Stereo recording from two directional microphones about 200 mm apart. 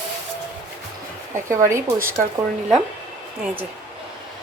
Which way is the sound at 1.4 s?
15° right (ahead or behind).